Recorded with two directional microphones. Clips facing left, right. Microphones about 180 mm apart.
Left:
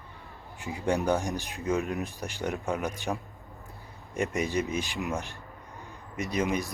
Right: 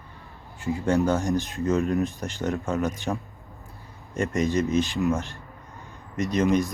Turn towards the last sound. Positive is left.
turn(degrees=10)  # may be behind; listen again after turning